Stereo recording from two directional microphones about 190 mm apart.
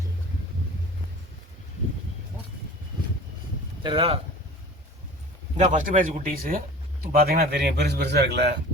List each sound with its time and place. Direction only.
3.8 s speech: 25° right (ahead or behind)
5.5 s a man's voice: 40° right (ahead or behind); by 8.5 s 60° right (ahead or behind)